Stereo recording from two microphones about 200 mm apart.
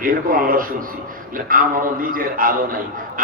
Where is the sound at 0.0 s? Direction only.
45° right (ahead or behind).